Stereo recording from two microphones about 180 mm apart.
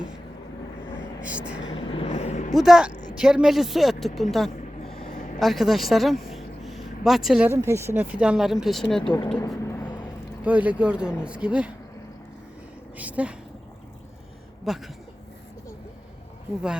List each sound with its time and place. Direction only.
1.2 s speech: 5° right (ahead or behind)
1.6 s vehicle: 30° left (ahead or behind)
2.5 s a woman's voice: centre (ahead or behind)
4.9 s a sound: 35° left (ahead or behind)
5.1 s vehicle: 50° left (ahead or behind)
5.4 s a woman's voice: centre (ahead or behind)
9.0 s speech: 25° left (ahead or behind)
9.6 s a sound: 10° left (ahead or behind)
10.4 s speech: 10° right (ahead or behind)
13.0 s speech: 10° right (ahead or behind)
14.7 s a woman's voice: centre (ahead or behind)